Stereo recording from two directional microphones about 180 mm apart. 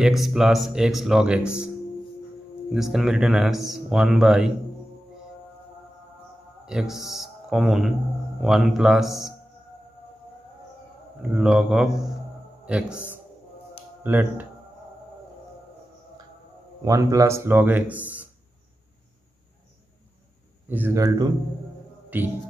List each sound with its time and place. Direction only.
0.0 s speech: centre (ahead or behind)
2.7 s speech: centre (ahead or behind)
6.6 s speech: 5° right (ahead or behind)
11.2 s speech: 5° right (ahead or behind)
12.9 s a man's voice: 10° left (ahead or behind)
14.0 s a man's voice: 10° right (ahead or behind)
16.8 s a man's voice: 20° right (ahead or behind)
20.6 s a man's voice: 10° right (ahead or behind)